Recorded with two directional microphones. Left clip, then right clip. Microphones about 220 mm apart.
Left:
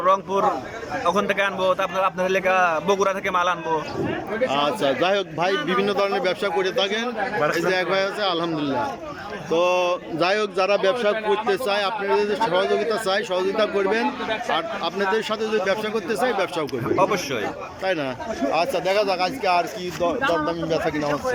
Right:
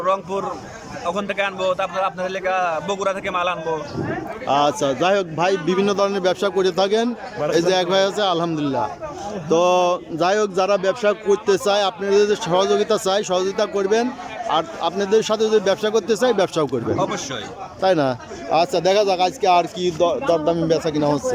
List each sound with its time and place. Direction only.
0.0 s a man's voice: centre (ahead or behind)
4.4 s a man's voice: 15° right (ahead or behind)
17.8 s a man's voice: 15° right (ahead or behind)